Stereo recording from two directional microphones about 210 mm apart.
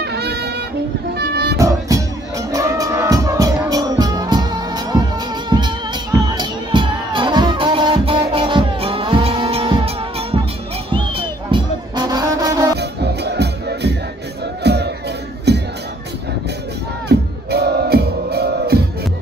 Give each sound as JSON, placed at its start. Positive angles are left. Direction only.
{"t": 0.0, "sound": "music", "side_deg": -50}
{"t": 1.6, "sound": "music", "side_deg": -15}
{"t": 6.3, "sound": "music", "side_deg": -20}
{"t": 12.7, "sound": "music", "side_deg": -50}
{"t": 17.1, "sound": "music", "side_deg": -50}